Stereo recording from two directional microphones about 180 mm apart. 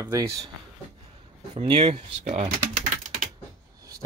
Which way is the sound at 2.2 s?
45° right (ahead or behind).